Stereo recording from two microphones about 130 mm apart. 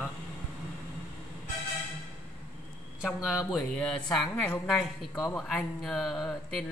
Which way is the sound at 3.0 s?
5° right (ahead or behind).